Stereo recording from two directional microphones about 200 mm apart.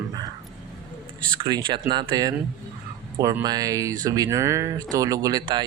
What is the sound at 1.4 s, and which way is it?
Speech, 20° right (ahead or behind).